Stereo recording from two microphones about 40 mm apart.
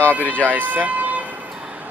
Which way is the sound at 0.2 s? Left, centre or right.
Left.